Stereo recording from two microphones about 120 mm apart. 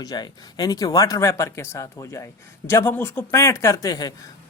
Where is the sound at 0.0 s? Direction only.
30° left (ahead or behind).